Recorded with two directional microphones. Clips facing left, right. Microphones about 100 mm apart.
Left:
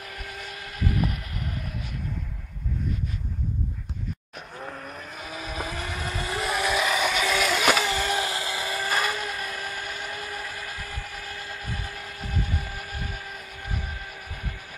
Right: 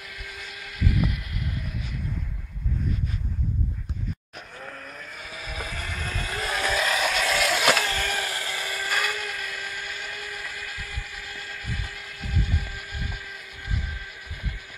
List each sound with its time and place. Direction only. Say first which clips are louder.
0.1 s vehicle: left 3 dB; 40° left (ahead or behind)
4.6 s vehicle: left 3 dB; 20° left (ahead or behind)
8.0 s vehicle: left 3 dB; 20° left (ahead or behind); by 13.1 s 35° left (ahead or behind)